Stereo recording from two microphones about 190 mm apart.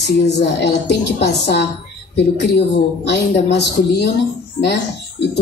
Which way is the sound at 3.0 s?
60° left (ahead or behind).